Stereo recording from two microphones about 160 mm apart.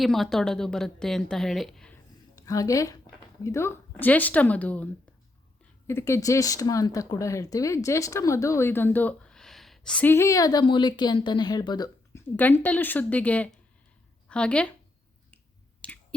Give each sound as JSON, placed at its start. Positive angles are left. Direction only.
{"t": 0.0, "sound": "a woman's voice", "side_deg": 0}
{"t": 2.3, "sound": "a woman's voice", "side_deg": 20}
{"t": 5.9, "sound": "speech", "side_deg": 15}
{"t": 12.4, "sound": "speech", "side_deg": 10}
{"t": 15.8, "sound": "a sound", "side_deg": 10}